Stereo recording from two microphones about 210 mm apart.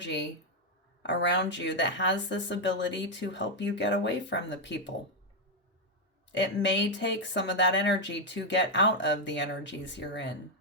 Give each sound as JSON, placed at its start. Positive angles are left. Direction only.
{"t": 0.0, "sound": "speech", "side_deg": 55}
{"t": 6.3, "sound": "speech", "side_deg": 60}